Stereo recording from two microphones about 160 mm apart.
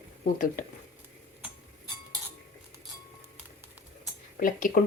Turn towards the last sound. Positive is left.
turn(degrees=60)  # may be behind; listen again after turning